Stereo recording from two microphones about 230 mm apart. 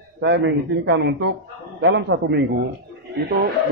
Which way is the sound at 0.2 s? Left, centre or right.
Right.